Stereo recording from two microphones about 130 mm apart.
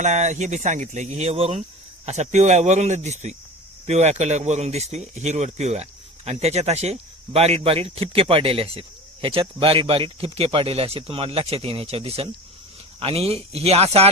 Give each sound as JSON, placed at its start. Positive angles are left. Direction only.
{"t": 0.0, "sound": "speech", "side_deg": -65}